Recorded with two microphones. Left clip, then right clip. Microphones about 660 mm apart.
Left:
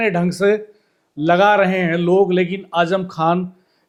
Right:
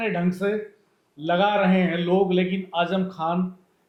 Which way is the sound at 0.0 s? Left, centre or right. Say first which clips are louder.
Left 8 dB; left.